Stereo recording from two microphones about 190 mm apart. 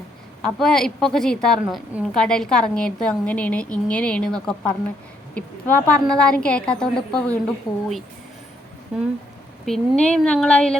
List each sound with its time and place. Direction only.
0.4 s a woman's voice: 5° left (ahead or behind)
7.7 s speech: 20° left (ahead or behind)
8.9 s a woman's voice: 5° right (ahead or behind)